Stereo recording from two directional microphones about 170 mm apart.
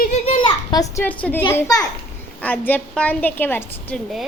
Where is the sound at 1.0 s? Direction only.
10° left (ahead or behind).